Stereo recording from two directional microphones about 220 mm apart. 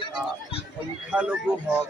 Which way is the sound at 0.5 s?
25° left (ahead or behind).